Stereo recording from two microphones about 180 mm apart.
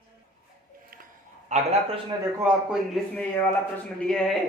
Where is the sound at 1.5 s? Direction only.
40° right (ahead or behind).